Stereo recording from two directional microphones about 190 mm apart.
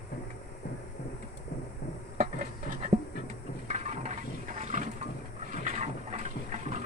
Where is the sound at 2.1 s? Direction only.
45° right (ahead or behind).